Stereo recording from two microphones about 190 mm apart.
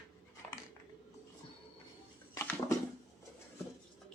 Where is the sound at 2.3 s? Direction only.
15° left (ahead or behind).